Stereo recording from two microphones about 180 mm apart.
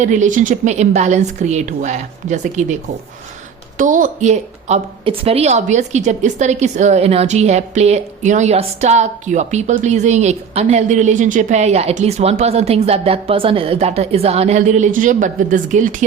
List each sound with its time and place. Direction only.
0.0 s a woman's voice: 45° right (ahead or behind)
3.8 s a woman's voice: 45° right (ahead or behind)